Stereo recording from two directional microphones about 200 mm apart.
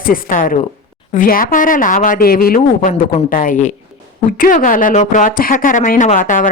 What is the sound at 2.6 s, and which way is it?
A woman's voice, 35° left (ahead or behind).